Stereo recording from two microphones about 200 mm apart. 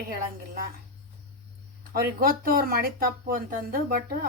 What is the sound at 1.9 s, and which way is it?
Speech, 45° right (ahead or behind).